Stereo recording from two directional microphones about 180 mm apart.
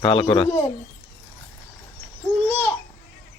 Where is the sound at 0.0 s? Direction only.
30° left (ahead or behind).